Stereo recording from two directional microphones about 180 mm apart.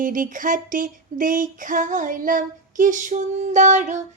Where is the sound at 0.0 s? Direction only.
50° right (ahead or behind).